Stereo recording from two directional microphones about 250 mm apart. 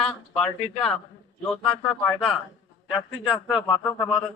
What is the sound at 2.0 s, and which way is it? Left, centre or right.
A man's voice, centre.